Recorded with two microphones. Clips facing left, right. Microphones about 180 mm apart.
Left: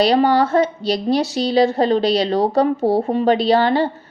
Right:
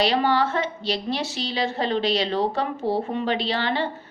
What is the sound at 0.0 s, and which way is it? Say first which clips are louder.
A woman's voice: left 6 dB; 40° left (ahead or behind).